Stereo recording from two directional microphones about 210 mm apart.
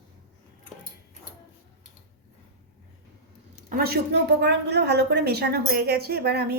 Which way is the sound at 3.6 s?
45° right (ahead or behind).